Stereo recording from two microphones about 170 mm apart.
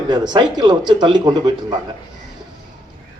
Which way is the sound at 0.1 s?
25° right (ahead or behind).